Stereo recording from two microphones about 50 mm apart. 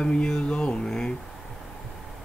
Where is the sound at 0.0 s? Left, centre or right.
Centre.